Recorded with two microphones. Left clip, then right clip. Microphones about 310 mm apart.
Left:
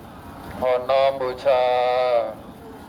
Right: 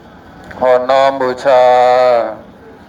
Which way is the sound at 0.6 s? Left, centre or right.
Right.